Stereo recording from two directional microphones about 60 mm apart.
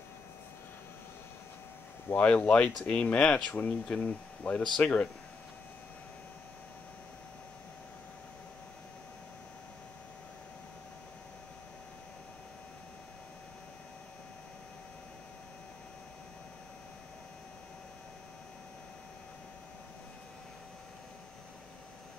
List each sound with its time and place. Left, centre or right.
2.1 s speech: left